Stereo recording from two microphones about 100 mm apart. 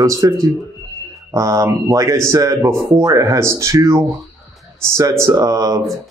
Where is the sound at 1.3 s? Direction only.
30° right (ahead or behind).